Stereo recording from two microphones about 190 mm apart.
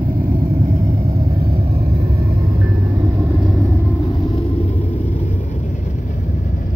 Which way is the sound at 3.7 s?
15° left (ahead or behind).